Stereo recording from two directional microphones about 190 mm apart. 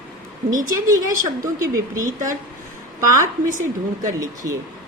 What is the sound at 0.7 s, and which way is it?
A woman's voice, 20° right (ahead or behind).